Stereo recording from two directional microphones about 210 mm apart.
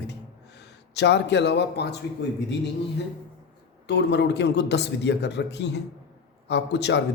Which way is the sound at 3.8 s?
55° left (ahead or behind).